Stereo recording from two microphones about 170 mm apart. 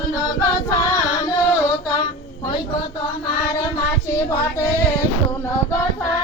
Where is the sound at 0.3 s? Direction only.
20° left (ahead or behind).